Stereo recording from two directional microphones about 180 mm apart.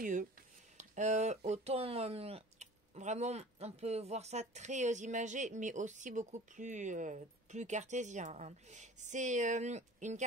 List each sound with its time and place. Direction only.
0.0 s speech: 50° right (ahead or behind)